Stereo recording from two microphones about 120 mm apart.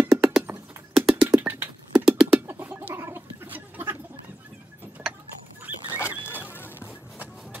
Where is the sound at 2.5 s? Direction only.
20° right (ahead or behind).